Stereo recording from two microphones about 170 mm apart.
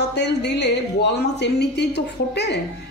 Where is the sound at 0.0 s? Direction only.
80° left.